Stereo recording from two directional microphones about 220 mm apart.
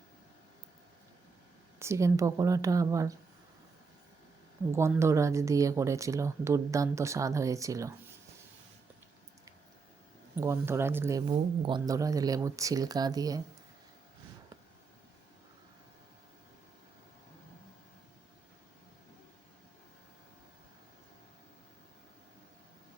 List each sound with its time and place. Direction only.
1.8 s speech: 15° right (ahead or behind)
4.7 s speech: 10° right (ahead or behind)
10.3 s speech: 10° right (ahead or behind)
11.3 s speech: 20° right (ahead or behind)